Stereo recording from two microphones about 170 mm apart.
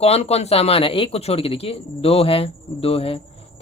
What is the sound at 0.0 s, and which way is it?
Speech, 35° left (ahead or behind).